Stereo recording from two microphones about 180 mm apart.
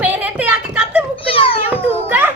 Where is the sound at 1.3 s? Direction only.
30° left (ahead or behind).